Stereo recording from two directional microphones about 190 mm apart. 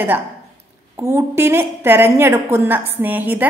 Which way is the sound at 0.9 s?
15° right (ahead or behind).